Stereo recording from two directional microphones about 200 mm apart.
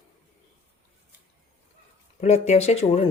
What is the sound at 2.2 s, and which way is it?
Speech, 35° left (ahead or behind).